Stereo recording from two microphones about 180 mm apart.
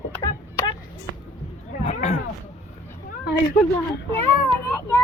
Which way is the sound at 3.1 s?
55° left (ahead or behind).